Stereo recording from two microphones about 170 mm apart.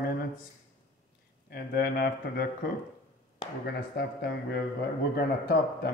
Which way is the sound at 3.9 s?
70° left (ahead or behind).